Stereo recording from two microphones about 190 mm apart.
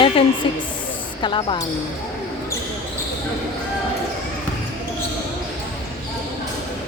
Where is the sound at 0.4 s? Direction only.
25° left (ahead or behind).